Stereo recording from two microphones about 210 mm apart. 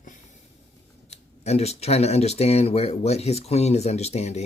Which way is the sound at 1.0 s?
30° left (ahead or behind).